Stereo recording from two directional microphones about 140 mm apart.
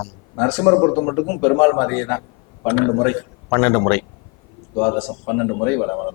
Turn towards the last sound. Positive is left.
turn(degrees=20)  # may be behind; listen again after turning